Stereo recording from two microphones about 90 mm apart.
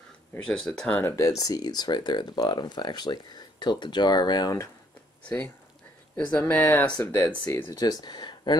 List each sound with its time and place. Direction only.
0.5 s speech: 5° left (ahead or behind)
1.0 s speech: 35° left (ahead or behind); by 4.6 s 50° left (ahead or behind)
6.4 s speech: 20° left (ahead or behind)
7.8 s speech: 50° left (ahead or behind)